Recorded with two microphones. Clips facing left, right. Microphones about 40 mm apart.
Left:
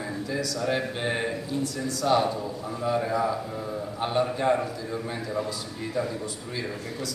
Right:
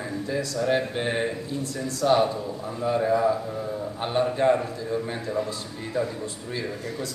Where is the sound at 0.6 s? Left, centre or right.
Centre.